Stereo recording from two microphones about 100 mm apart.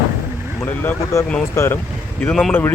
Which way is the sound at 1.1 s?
30° left (ahead or behind).